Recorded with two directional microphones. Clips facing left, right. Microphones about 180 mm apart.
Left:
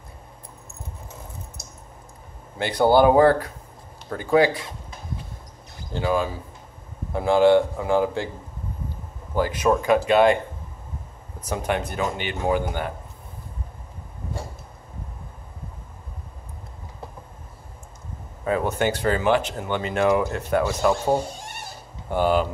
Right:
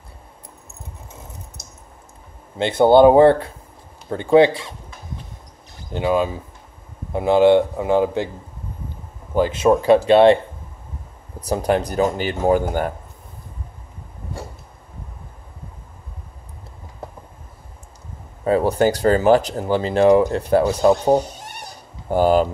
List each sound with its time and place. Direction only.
2.6 s a man's voice: 25° right (ahead or behind)
5.9 s a man's voice: 20° right (ahead or behind)
9.3 s speech: 20° right (ahead or behind)
11.4 s speech: 35° right (ahead or behind)
18.4 s speech: 35° right (ahead or behind)
22.1 s speech: 40° right (ahead or behind)